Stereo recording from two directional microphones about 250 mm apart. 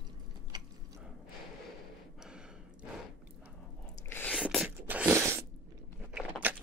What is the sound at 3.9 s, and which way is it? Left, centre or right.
Chewing, centre.